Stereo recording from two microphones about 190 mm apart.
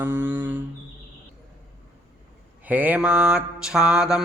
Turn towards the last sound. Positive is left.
turn(degrees=-5)  # may be behind; listen again after turning